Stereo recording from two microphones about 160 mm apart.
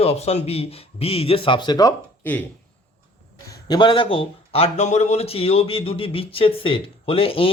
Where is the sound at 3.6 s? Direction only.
25° left (ahead or behind).